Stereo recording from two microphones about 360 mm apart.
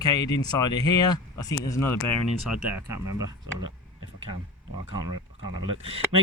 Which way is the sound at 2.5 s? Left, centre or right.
Centre.